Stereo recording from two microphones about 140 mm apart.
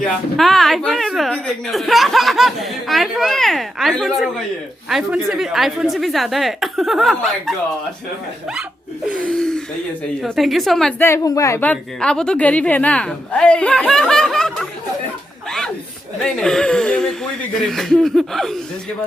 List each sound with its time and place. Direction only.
0.0 s speech: centre (ahead or behind)
9.1 s gasp: 5° left (ahead or behind)
10.2 s speech: centre (ahead or behind)
11.0 s a woman's voice: 25° left (ahead or behind)
11.6 s a woman's voice: 10° left (ahead or behind)
15.4 s chuckle: 5° left (ahead or behind)
16.2 s speech: 5° left (ahead or behind)